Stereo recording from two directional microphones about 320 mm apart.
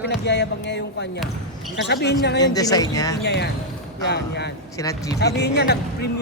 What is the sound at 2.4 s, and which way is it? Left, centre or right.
Speech, centre.